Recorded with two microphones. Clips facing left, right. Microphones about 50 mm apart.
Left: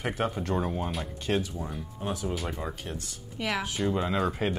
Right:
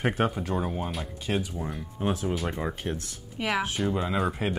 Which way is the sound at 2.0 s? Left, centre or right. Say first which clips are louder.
Right 5 dB; right.